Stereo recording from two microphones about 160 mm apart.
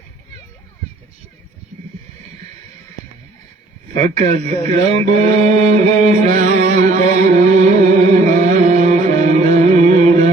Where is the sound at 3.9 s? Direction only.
45° right (ahead or behind).